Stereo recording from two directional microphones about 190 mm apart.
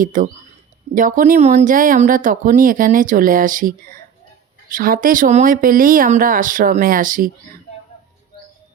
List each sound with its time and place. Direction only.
0.0 s speech: 45° right (ahead or behind)